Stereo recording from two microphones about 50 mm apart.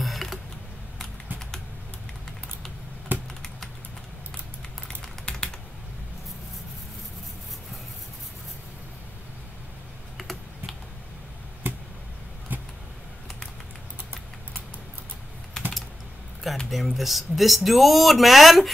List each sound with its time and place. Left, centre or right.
0.0 s a sound: centre
3.1 s computer keyboard: right
10.1 s computer keyboard: centre
11.6 s a sound: right
15.6 s typing: centre
16.7 s speech: centre